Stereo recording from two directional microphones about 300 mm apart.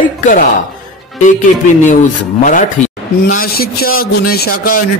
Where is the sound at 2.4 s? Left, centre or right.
Left.